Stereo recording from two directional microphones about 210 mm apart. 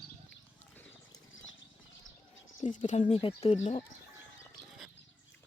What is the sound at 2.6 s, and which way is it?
Speech, 35° left (ahead or behind).